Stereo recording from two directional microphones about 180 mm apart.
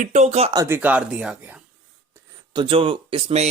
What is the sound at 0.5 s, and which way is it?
Speech, 15° right (ahead or behind).